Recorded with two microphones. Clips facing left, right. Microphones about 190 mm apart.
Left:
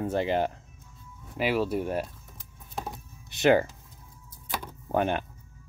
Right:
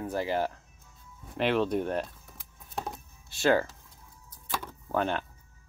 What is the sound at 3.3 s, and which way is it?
Speech, 20° left (ahead or behind).